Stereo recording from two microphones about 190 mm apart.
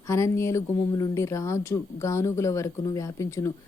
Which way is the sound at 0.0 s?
15° left (ahead or behind).